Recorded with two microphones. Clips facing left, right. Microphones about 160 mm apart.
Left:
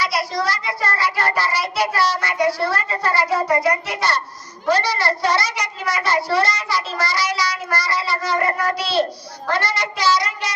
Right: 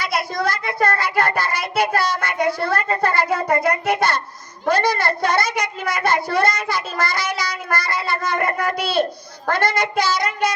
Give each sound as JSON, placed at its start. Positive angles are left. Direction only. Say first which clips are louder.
{"t": 0.0, "sound": "a woman's voice", "louder": "even", "side_deg": -55}